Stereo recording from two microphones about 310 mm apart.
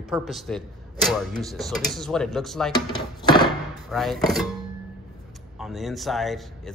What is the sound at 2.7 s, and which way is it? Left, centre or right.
Speech, centre.